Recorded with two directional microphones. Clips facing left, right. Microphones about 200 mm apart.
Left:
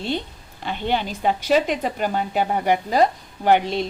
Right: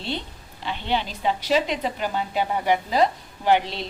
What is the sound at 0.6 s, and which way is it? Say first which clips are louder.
A woman's voice: left 3 dB; 50° left (ahead or behind).